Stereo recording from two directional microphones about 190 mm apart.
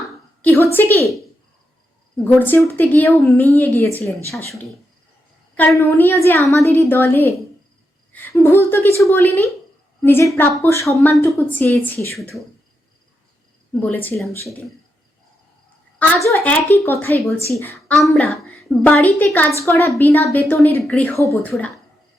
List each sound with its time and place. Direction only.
0.4 s a woman's voice: 10° left (ahead or behind)
2.2 s a woman's voice: 10° left (ahead or behind)
5.5 s a woman's voice: 15° left (ahead or behind)
13.7 s a woman's voice: 10° left (ahead or behind)
16.0 s a woman's voice: 10° left (ahead or behind)
21.2 s a woman's voice: 15° left (ahead or behind)